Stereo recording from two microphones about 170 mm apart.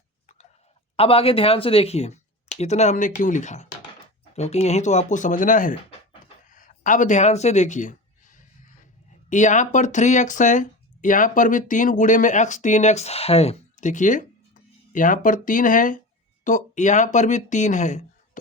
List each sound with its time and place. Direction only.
0.9 s speech: 35° left (ahead or behind)